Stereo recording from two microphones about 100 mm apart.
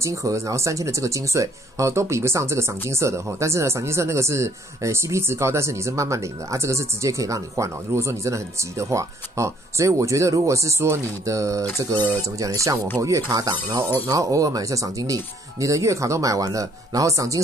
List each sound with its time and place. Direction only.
0.0 s speech: 30° right (ahead or behind)